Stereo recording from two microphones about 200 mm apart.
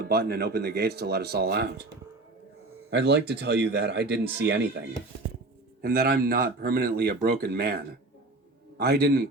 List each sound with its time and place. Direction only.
0.0 s speech: 50° right (ahead or behind)
2.9 s speech: 60° right (ahead or behind)
8.8 s speech: 50° right (ahead or behind)